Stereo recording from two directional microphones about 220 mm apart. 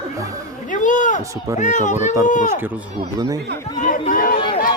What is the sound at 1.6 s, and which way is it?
Speech, 35° left (ahead or behind).